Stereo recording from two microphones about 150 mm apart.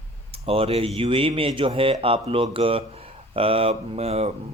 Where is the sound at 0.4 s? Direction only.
40° right (ahead or behind).